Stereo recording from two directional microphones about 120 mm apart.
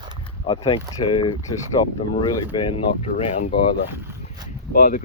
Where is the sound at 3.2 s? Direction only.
65° left (ahead or behind).